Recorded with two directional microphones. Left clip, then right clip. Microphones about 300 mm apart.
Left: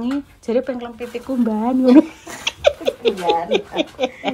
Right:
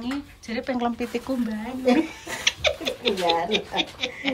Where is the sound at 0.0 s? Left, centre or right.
Centre.